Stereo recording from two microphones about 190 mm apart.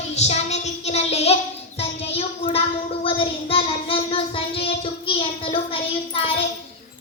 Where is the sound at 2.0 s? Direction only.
30° left (ahead or behind).